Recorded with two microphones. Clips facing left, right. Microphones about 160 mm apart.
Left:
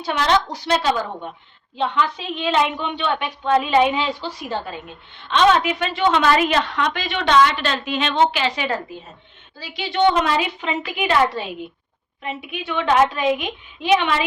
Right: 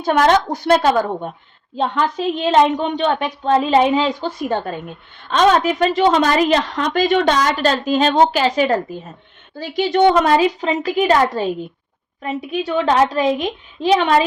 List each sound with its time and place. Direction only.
0.0 s a woman's voice: 50° right (ahead or behind)